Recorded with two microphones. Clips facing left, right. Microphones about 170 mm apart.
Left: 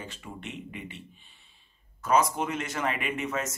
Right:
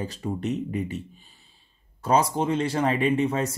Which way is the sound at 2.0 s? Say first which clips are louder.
Right 3 dB; 30° right (ahead or behind).